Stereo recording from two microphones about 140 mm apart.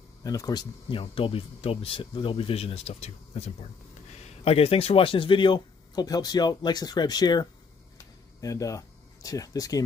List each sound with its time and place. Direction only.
0.2 s speech: 25° left (ahead or behind)